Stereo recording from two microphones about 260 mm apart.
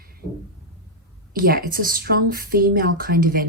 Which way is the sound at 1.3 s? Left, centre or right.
Right.